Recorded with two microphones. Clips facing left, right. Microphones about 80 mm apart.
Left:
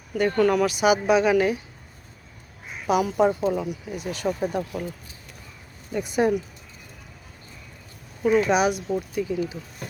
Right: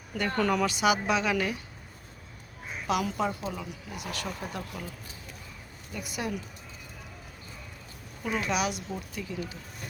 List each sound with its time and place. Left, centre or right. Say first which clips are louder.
0.1 s speech: left 7 dB; centre
0.7 s speech: left 6 dB; centre
2.8 s speech: left 8 dB; centre
3.2 s speech: left 10 dB; left
4.1 s speech: left 11 dB; left
5.9 s speech: left 12 dB; left
8.2 s speech: left 10 dB; centre